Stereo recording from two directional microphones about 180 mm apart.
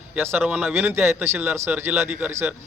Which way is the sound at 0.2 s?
10° right (ahead or behind).